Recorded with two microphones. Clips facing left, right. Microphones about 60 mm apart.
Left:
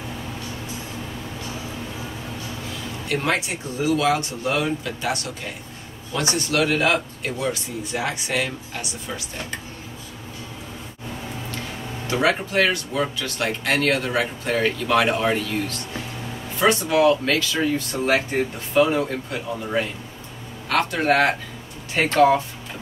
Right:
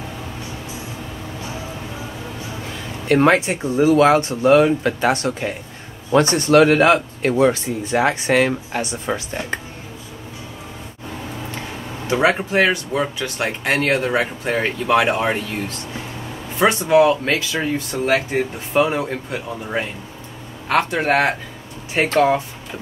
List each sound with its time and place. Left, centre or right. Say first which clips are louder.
3.3 s speech: right 8 dB; right
7.6 s speech: right 8 dB; right
12.1 s speech: right 4 dB; right
16.5 s speech: right 5 dB; right